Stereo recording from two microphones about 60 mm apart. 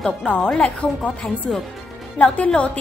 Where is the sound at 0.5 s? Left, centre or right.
Centre.